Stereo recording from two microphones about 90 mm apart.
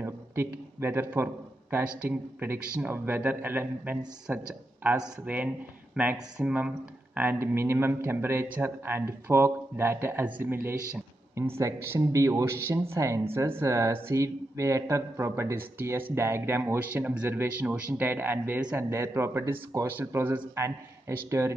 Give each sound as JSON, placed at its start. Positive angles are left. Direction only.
{"t": 0.0, "sound": "a man's voice", "side_deg": -25}